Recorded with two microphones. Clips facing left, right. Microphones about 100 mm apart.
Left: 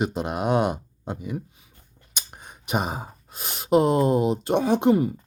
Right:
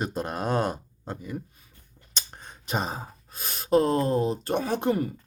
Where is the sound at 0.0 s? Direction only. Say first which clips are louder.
Left 4 dB; 10° left (ahead or behind).